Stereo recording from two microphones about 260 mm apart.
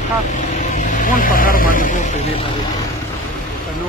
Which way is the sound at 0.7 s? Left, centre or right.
Left.